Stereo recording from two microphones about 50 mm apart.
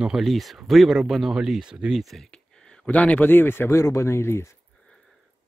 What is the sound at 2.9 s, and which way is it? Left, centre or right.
Speech, left.